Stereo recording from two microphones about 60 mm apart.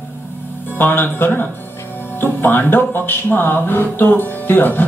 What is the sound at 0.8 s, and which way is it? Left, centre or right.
Speech, left.